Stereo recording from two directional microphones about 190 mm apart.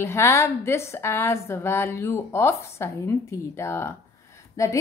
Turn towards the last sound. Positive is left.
turn(degrees=15)  # may be behind; listen again after turning